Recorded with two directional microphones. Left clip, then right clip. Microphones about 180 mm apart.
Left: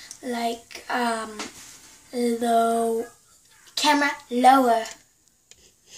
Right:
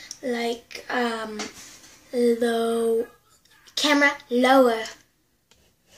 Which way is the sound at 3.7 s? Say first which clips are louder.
Right 1 dB; 10° left (ahead or behind).